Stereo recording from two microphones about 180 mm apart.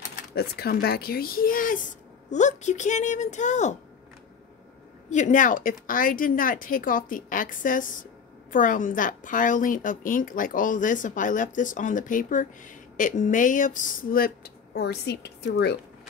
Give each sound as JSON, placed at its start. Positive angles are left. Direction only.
{"t": 0.3, "sound": "speech", "side_deg": 60}
{"t": 5.1, "sound": "a woman's voice", "side_deg": 45}